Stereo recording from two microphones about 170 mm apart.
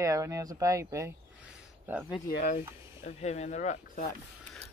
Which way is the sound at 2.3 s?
65° left (ahead or behind).